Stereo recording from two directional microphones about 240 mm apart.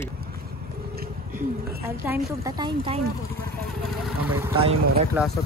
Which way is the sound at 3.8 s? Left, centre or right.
Centre.